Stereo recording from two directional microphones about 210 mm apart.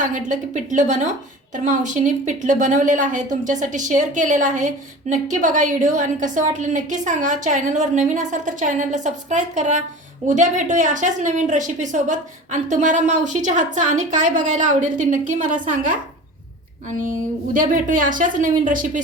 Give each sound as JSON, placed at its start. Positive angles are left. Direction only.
{"t": 0.0, "sound": "a woman's voice", "side_deg": -35}
{"t": 17.0, "sound": "a woman's voice", "side_deg": -40}